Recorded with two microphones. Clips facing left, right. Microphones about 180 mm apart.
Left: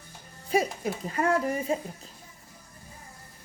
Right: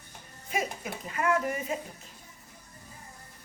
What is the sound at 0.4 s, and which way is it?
A woman's voice, 35° left (ahead or behind).